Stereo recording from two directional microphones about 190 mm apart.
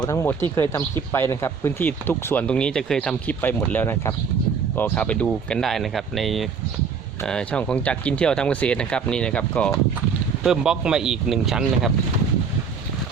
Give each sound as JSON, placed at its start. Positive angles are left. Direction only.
{"t": 0.0, "sound": "speech", "side_deg": 15}
{"t": 10.4, "sound": "speech", "side_deg": -5}